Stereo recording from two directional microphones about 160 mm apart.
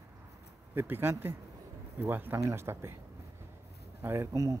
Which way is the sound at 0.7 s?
15° right (ahead or behind).